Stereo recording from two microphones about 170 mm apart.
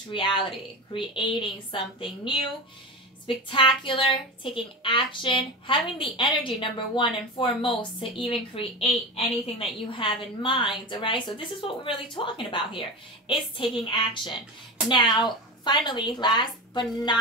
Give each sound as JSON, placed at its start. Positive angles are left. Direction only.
{"t": 0.1, "sound": "a woman's voice", "side_deg": 30}